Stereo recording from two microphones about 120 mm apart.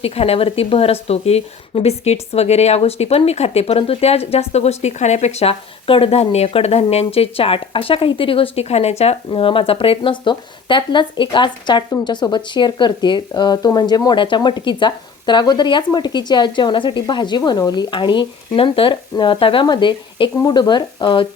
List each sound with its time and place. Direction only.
0.0 s speech: 55° left (ahead or behind)